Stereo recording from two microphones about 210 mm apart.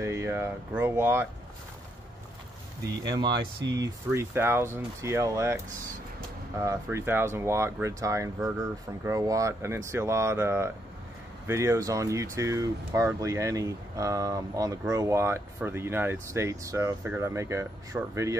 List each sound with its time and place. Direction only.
0.0 s speech: 15° right (ahead or behind)
3.2 s speech: 20° right (ahead or behind)
6.6 s speech: 15° right (ahead or behind)